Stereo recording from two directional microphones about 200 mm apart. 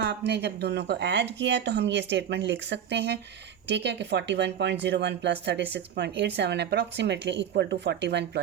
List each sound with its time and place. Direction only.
0.0 s speech: 55° right (ahead or behind)